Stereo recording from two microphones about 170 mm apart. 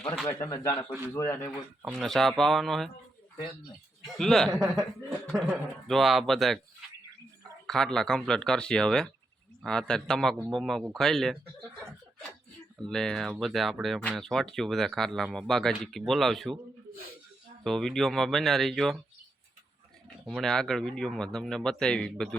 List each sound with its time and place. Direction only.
0.4 s speech: 20° left (ahead or behind)
1.8 s speech: centre (ahead or behind)
4.0 s speech: centre (ahead or behind)
7.7 s speech: 5° left (ahead or behind)
12.8 s speech: 5° left (ahead or behind)
17.6 s speech: centre (ahead or behind)
20.2 s speech: 5° left (ahead or behind)